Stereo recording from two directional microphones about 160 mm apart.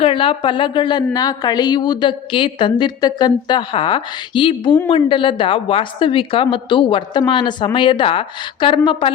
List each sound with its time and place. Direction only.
0.0 s a woman's voice: 35° left (ahead or behind)